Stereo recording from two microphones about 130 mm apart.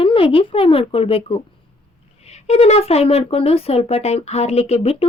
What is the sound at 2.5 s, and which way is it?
Speech, 55° left (ahead or behind).